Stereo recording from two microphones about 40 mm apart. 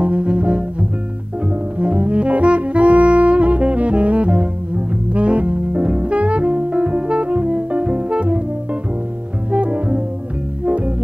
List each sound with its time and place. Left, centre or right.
0.0 s double bass: right
1.8 s saxophone: right
9.5 s music: right